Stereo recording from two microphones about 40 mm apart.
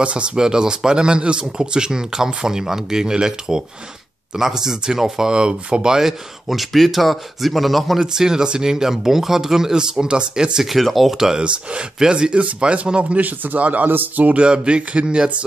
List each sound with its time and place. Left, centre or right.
0.0 s a sound: right
0.4 s speech: centre
8.0 s speech: centre
10.7 s speech: centre
11.1 s speech: centre; by 13.2 s right
13.2 s a man's voice: right
13.8 s speech: right
14.2 s a sound: right
14.5 s speech: right